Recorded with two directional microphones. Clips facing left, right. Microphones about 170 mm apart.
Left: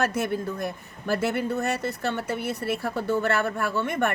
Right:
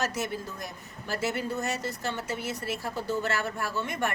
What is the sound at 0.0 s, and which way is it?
Speech, 55° left (ahead or behind).